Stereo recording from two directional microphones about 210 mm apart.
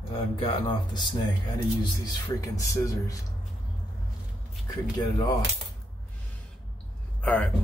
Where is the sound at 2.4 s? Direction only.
15° left (ahead or behind).